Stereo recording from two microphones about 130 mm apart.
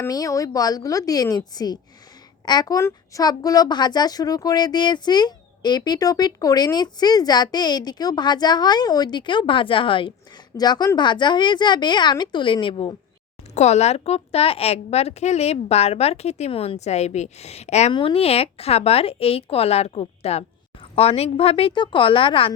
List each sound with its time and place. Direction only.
0.0 s a woman's voice: 25° left (ahead or behind); by 10.1 s 40° left (ahead or behind)
10.6 s a woman's voice: 30° left (ahead or behind)
13.5 s a woman's voice: 60° left (ahead or behind)
17.9 s a woman's voice: 45° left (ahead or behind)